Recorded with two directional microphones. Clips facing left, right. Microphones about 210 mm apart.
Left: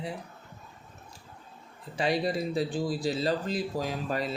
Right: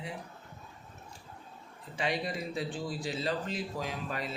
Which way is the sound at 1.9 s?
35° left (ahead or behind).